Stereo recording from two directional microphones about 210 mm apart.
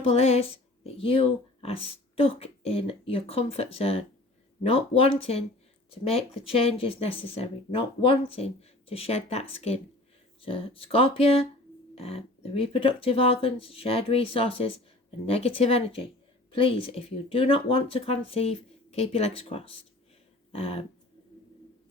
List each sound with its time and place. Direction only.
0.0 s speech: 30° left (ahead or behind)